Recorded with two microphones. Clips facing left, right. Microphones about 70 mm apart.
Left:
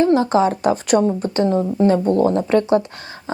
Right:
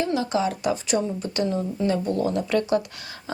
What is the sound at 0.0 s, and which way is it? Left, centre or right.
Speech, left.